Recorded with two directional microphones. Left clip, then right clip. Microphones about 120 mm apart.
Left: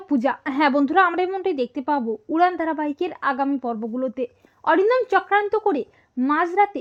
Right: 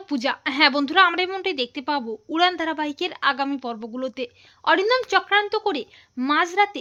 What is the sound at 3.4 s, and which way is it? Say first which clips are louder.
A woman's voice: left 3 dB; 40° left (ahead or behind).